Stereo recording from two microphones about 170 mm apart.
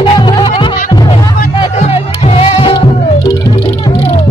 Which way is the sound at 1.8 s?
35° left (ahead or behind).